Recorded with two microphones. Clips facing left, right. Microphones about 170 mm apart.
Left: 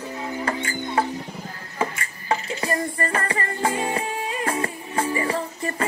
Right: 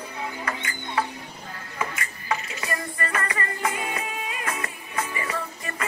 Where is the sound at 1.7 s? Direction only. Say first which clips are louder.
Left 4 dB; 30° left (ahead or behind).